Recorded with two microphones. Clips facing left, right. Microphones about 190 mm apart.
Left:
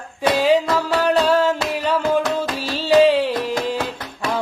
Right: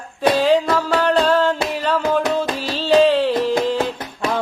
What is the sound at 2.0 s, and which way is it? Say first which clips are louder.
Music: right 1 dB; 20° right (ahead or behind).